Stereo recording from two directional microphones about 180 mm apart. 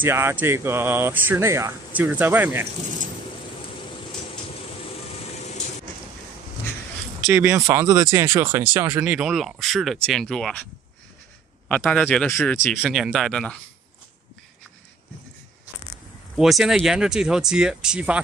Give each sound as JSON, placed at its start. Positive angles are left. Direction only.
{"t": 0.0, "sound": "speech", "side_deg": -15}
{"t": 4.3, "sound": "a sound", "side_deg": 30}
{"t": 7.2, "sound": "speech", "side_deg": -10}
{"t": 9.0, "sound": "speech", "side_deg": -5}
{"t": 11.7, "sound": "speech", "side_deg": 5}
{"t": 12.8, "sound": "speech", "side_deg": 0}
{"t": 16.3, "sound": "speech", "side_deg": 0}